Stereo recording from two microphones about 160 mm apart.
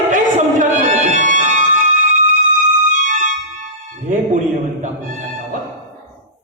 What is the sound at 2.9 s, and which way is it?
Music, 55° right (ahead or behind).